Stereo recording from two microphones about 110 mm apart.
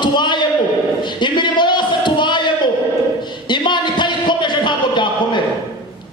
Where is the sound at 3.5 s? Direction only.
45° left (ahead or behind).